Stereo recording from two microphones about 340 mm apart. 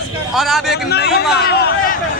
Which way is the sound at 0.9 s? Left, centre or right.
Left.